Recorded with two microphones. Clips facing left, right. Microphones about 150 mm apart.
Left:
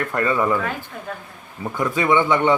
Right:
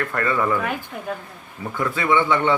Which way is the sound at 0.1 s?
20° left (ahead or behind).